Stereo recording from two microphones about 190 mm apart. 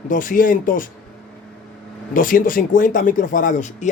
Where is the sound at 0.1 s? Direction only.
45° left (ahead or behind).